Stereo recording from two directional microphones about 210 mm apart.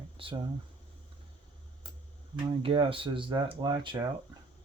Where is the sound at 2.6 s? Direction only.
25° right (ahead or behind).